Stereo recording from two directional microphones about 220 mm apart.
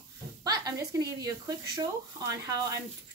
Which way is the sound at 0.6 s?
15° right (ahead or behind).